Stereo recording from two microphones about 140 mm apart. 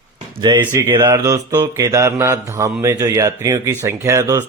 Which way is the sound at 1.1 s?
25° right (ahead or behind).